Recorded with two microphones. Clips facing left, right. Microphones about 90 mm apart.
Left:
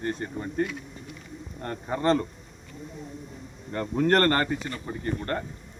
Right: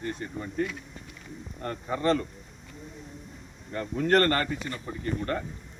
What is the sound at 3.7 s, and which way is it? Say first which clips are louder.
Speech: left 2 dB; 50° left (ahead or behind).